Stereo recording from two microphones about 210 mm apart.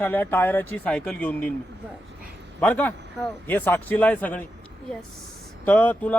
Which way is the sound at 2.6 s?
10° left (ahead or behind).